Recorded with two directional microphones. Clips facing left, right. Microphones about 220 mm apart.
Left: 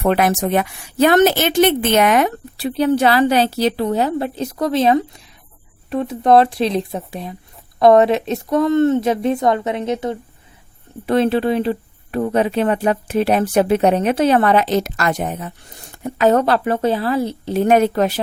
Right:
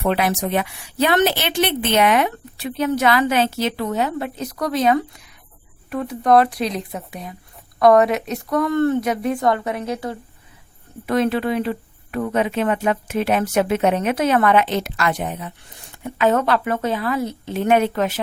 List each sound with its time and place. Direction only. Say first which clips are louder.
0.0 s speech: left 4 dB; 50° left (ahead or behind)